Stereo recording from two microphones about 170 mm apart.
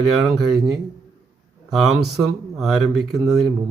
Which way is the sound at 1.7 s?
Centre (ahead or behind).